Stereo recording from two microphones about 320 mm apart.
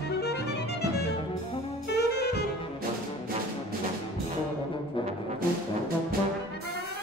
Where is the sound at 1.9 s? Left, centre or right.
Left.